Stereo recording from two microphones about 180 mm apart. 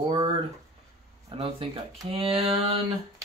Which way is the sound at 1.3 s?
30° right (ahead or behind).